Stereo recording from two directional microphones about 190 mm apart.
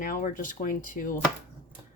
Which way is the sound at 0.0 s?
45° left (ahead or behind).